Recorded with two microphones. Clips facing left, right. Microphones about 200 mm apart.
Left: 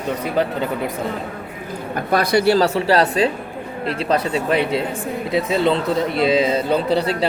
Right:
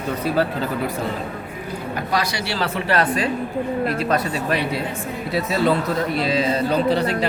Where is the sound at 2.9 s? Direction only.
30° left (ahead or behind).